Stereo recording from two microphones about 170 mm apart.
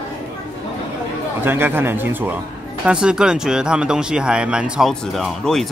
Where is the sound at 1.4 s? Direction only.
15° right (ahead or behind).